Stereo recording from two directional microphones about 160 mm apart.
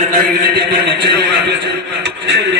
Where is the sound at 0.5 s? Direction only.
90° right.